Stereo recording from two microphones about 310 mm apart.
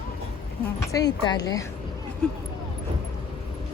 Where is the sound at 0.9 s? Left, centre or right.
Centre.